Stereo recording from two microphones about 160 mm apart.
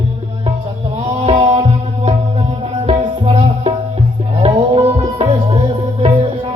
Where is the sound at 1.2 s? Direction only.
45° right (ahead or behind).